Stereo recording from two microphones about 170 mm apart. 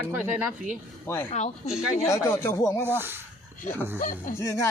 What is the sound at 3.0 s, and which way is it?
Speech, 15° right (ahead or behind).